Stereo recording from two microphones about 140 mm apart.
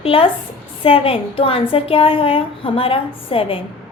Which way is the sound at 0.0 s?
40° left (ahead or behind).